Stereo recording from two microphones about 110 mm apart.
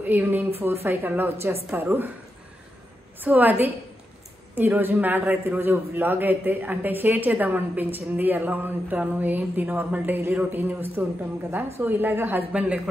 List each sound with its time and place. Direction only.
0.0 s a woman's voice: 15° right (ahead or behind)
3.2 s a man's voice: 15° right (ahead or behind)